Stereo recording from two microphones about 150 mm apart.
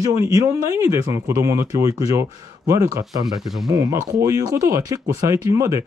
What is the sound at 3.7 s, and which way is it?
Speech, 25° right (ahead or behind).